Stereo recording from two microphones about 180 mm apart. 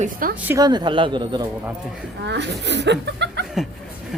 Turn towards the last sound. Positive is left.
turn(degrees=-70)  # may be behind; listen again after turning